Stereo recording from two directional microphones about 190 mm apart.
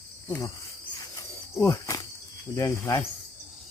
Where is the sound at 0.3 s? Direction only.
15° left (ahead or behind).